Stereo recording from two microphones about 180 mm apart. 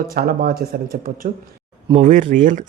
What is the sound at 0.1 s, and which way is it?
Speech, 55° right (ahead or behind).